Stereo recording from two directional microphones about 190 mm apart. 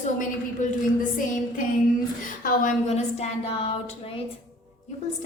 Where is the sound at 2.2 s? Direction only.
45° left (ahead or behind).